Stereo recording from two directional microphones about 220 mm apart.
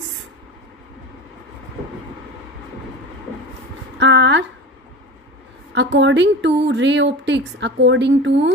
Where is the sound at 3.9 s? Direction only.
55° right (ahead or behind).